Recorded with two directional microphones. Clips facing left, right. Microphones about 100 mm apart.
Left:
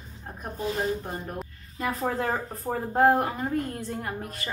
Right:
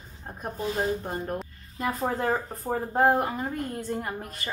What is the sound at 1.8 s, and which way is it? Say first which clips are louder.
A woman's voice: right 1 dB; 20° right (ahead or behind).